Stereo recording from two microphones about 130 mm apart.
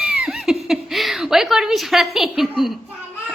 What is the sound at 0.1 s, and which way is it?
Laughter, 5° right (ahead or behind).